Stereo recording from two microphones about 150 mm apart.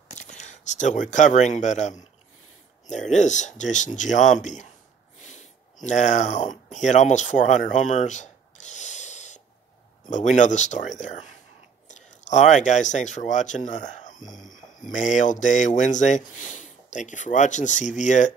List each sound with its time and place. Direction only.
0.1 s speech: 50° left (ahead or behind)
5.2 s snort: 55° left (ahead or behind)
5.9 s speech: 50° left (ahead or behind)